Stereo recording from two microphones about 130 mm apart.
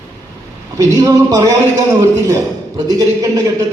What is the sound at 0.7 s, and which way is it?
A man's voice, 25° right (ahead or behind).